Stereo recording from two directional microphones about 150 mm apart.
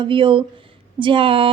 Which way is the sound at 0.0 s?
35° right (ahead or behind).